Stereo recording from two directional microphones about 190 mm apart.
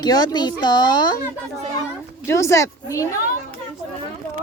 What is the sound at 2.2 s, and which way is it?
Speech, 15° left (ahead or behind).